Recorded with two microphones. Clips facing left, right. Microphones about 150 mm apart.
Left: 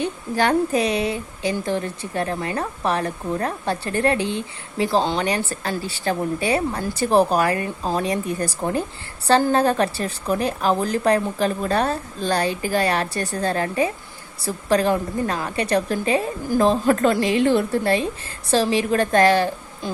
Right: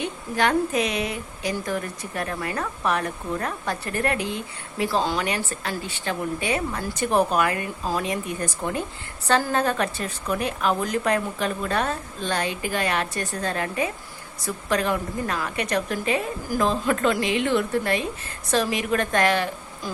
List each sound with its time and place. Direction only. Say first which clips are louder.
0.0 s a woman's voice: left 3 dB; 35° left (ahead or behind)